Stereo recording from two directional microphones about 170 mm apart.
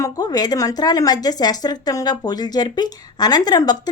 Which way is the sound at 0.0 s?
25° left (ahead or behind).